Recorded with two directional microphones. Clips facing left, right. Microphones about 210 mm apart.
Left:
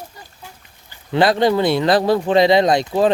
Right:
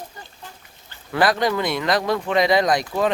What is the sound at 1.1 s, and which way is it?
Speech, 25° left (ahead or behind).